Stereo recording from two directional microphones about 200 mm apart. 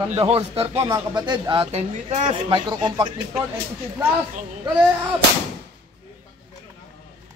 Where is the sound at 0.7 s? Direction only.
20° right (ahead or behind).